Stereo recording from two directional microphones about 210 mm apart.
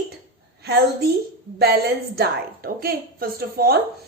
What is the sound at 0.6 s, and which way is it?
A woman's voice, 50° right (ahead or behind).